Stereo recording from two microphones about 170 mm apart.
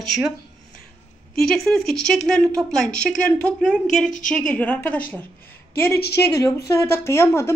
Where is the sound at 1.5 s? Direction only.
5° left (ahead or behind).